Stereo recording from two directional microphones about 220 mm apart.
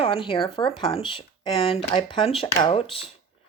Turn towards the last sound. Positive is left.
turn(degrees=25)  # may be behind; listen again after turning